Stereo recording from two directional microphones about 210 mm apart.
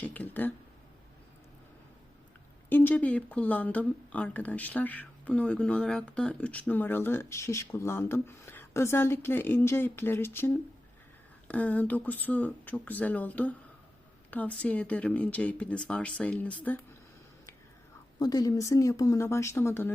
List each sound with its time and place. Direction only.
0.0 s speech: 10° left (ahead or behind)
2.6 s speech: 10° left (ahead or behind)
18.2 s speech: 20° left (ahead or behind)